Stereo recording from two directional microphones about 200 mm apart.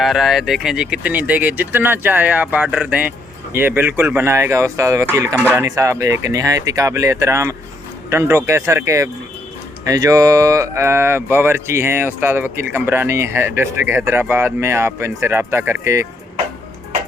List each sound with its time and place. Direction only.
0.0 s speech: centre (ahead or behind)